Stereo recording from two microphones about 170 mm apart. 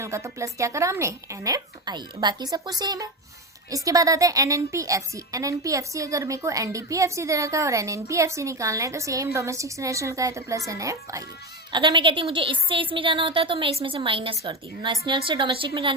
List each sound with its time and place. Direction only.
0.0 s a woman's voice: 15° right (ahead or behind)